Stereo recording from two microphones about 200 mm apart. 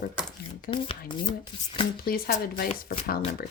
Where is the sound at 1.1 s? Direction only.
25° left (ahead or behind).